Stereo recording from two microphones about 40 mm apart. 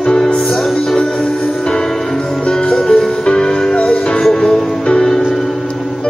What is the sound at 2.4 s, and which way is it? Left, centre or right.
Music, left.